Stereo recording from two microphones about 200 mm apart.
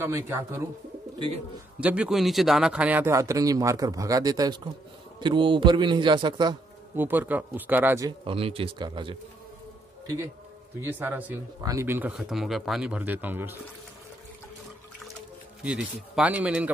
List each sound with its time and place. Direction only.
0.0 s a man's voice: 15° right (ahead or behind)
1.8 s a man's voice: 5° right (ahead or behind); by 6.5 s 20° right (ahead or behind)
7.0 s a man's voice: 10° right (ahead or behind)
8.3 s a man's voice: 30° right (ahead or behind); by 13.6 s 10° right (ahead or behind)
15.6 s a man's voice: 5° right (ahead or behind)